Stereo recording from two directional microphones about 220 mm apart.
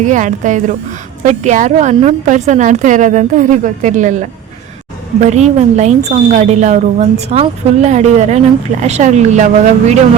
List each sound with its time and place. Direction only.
0.0 s a woman's voice: 35° right (ahead or behind)